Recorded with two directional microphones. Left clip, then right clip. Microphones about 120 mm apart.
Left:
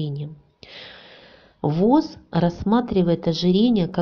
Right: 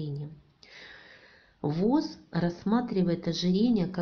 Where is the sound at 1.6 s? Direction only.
30° left (ahead or behind).